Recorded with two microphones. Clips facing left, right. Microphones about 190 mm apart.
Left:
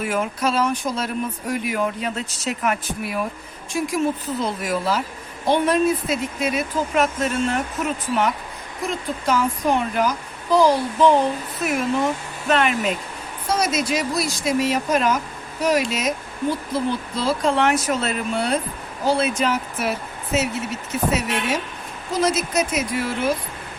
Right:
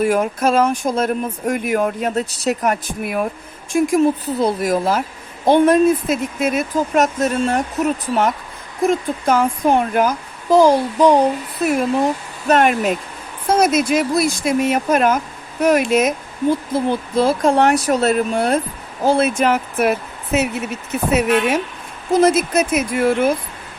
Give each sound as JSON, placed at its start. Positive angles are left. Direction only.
{"t": 0.0, "sound": "speech", "side_deg": -45}
{"t": 8.9, "sound": "speech", "side_deg": -50}
{"t": 12.5, "sound": "speech", "side_deg": -45}